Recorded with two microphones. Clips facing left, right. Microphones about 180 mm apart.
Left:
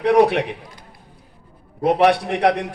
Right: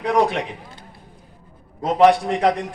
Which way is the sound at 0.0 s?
65° left (ahead or behind).